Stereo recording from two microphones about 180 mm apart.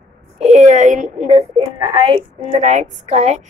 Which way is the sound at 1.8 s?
30° right (ahead or behind).